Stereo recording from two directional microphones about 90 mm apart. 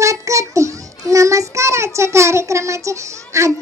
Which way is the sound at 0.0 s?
35° right (ahead or behind).